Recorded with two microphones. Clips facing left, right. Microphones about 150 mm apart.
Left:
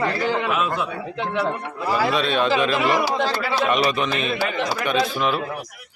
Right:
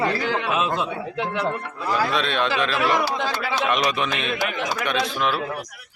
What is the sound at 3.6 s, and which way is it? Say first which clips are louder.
A man's voice: left 2 dB; centre (ahead or behind).